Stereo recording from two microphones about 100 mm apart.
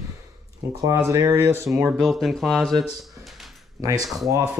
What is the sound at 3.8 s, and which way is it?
Speech, 35° right (ahead or behind).